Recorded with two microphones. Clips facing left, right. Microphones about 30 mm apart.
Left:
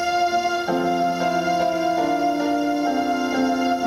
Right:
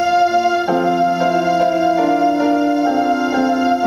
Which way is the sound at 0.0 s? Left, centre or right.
Centre.